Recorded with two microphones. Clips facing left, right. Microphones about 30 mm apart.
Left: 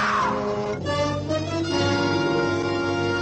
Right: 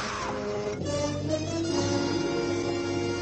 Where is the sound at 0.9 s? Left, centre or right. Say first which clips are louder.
Left 5 dB; left.